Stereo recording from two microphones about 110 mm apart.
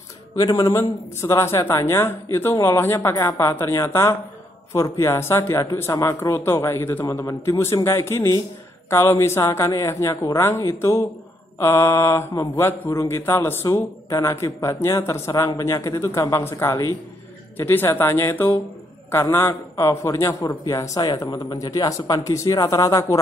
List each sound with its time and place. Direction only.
0.4 s speech: 35° left (ahead or behind)